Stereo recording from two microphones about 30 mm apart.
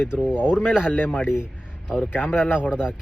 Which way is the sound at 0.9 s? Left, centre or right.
Left.